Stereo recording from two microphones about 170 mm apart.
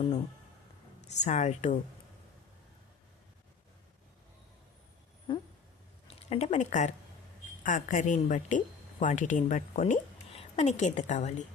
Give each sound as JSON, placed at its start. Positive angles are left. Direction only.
{"t": 1.0, "sound": "a woman's voice", "side_deg": 45}
{"t": 6.1, "sound": "a woman's voice", "side_deg": 35}